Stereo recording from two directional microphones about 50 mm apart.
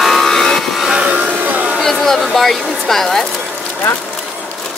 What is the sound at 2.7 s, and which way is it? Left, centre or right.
Speech, centre.